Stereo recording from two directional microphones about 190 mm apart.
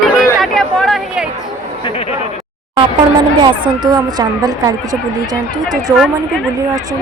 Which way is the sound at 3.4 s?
25° right (ahead or behind).